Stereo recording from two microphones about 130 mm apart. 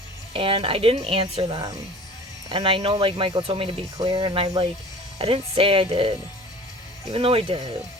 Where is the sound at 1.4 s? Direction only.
30° right (ahead or behind).